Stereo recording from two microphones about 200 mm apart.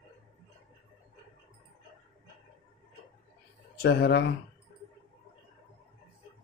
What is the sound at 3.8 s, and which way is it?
Speech, 55° left (ahead or behind).